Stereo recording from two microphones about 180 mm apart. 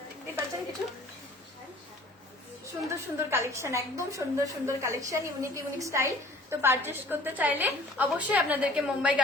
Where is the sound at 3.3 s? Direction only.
15° right (ahead or behind).